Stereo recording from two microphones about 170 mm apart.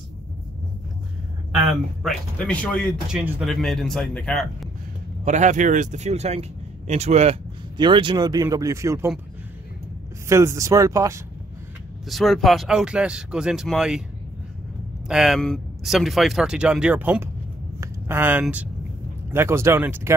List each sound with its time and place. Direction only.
1.5 s a man's voice: centre (ahead or behind)
5.2 s speech: 45° right (ahead or behind)
7.7 s speech: 25° right (ahead or behind)
10.2 s speech: 15° right (ahead or behind)
12.1 s a man's voice: centre (ahead or behind)
15.0 s a man's voice: 5° right (ahead or behind)